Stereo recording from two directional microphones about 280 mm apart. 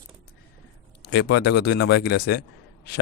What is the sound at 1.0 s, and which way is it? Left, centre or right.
Speech, left.